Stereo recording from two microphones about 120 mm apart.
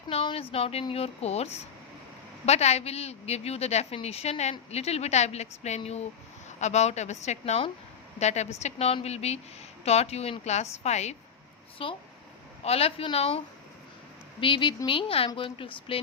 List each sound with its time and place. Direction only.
0.1 s a woman's voice: 55° left (ahead or behind)
11.8 s a woman's voice: 50° left (ahead or behind)
14.4 s a woman's voice: 45° left (ahead or behind)